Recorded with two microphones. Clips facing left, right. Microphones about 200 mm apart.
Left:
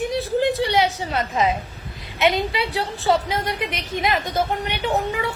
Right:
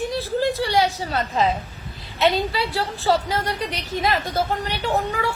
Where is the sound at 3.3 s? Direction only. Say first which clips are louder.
Even; 20° left (ahead or behind).